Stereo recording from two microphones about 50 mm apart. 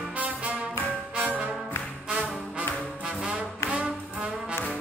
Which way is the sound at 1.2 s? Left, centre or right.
Right.